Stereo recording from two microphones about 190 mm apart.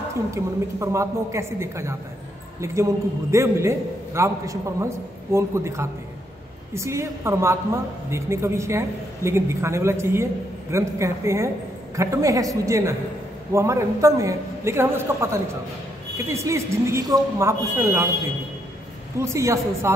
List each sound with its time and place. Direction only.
0.3 s a woman's voice: 15° right (ahead or behind)
19.2 s a woman's voice: 15° right (ahead or behind)